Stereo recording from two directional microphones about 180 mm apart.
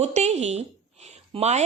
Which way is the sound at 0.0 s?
40° right (ahead or behind).